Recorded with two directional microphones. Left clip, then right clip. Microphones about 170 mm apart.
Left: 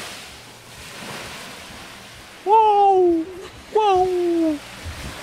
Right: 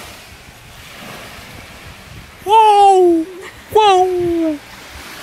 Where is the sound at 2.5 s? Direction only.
5° right (ahead or behind).